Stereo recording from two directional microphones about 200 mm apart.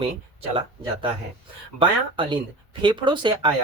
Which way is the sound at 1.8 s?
25° right (ahead or behind).